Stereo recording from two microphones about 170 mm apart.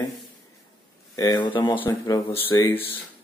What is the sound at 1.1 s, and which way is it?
Speech, 25° left (ahead or behind).